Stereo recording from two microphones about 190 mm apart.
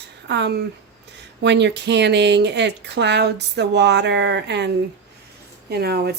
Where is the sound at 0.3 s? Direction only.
65° right (ahead or behind).